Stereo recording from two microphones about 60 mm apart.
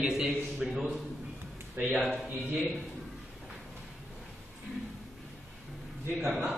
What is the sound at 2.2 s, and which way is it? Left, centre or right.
Speech, right.